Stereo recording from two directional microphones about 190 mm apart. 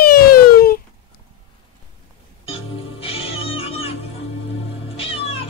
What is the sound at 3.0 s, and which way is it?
Cat, 30° left (ahead or behind).